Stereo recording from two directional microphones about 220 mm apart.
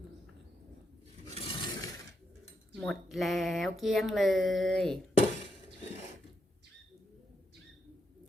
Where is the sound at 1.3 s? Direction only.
20° left (ahead or behind).